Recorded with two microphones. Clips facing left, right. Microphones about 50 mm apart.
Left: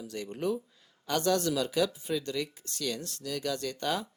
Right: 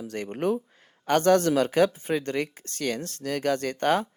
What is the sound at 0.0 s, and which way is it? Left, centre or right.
A man's voice, right.